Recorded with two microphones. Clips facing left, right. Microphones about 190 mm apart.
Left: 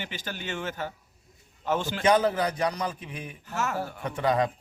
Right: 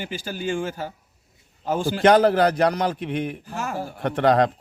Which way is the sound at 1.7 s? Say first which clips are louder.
Right 4 dB; 35° right (ahead or behind).